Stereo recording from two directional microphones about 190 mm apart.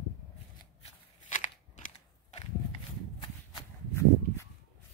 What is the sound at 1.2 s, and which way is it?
Scissors, 40° left (ahead or behind).